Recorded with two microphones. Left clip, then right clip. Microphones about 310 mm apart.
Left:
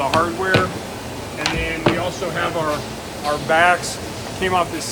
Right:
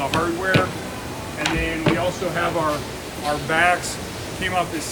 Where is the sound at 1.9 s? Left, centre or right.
Left.